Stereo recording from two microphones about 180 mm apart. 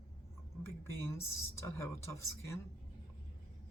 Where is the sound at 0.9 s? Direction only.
15° left (ahead or behind).